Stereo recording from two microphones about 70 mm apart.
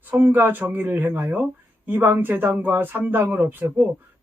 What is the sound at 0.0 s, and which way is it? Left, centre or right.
A man's voice, right.